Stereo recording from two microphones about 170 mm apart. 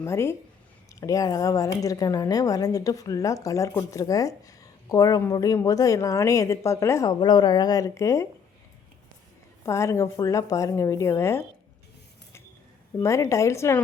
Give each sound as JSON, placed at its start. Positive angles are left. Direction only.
{"t": 0.0, "sound": "a woman's voice", "side_deg": 15}
{"t": 9.6, "sound": "speech", "side_deg": 15}
{"t": 13.0, "sound": "speech", "side_deg": 15}